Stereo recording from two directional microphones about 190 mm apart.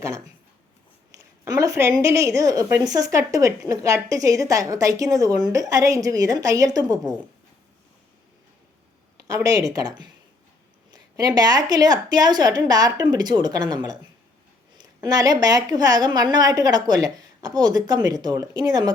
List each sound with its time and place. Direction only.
1.1 s a sound: 15° right (ahead or behind)
2.0 s a woman's voice: 15° right (ahead or behind)
9.1 s speech: 20° right (ahead or behind)